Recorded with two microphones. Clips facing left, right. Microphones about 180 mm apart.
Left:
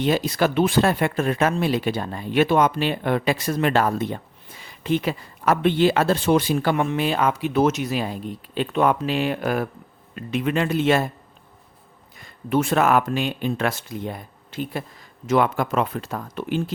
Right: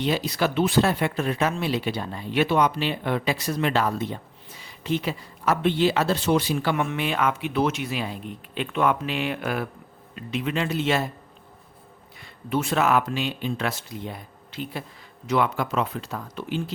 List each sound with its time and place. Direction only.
0.0 s speech: 50° left (ahead or behind)
10.2 s speech: 50° left (ahead or behind)
12.2 s speech: 50° left (ahead or behind)